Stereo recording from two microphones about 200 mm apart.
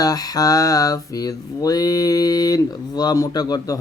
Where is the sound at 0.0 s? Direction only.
20° left (ahead or behind).